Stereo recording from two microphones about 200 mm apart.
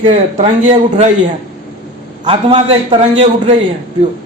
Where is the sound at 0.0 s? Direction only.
35° right (ahead or behind).